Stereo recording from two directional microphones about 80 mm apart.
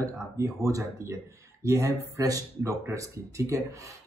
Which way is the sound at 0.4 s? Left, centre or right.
Right.